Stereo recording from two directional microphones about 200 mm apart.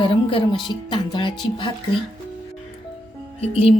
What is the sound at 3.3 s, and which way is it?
Speech, 30° left (ahead or behind).